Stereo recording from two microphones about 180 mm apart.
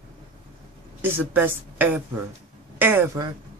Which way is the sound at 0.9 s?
10° right (ahead or behind).